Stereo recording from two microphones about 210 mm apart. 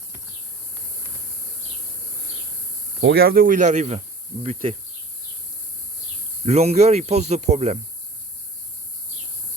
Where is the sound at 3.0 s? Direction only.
50° right (ahead or behind); by 4.0 s 35° right (ahead or behind).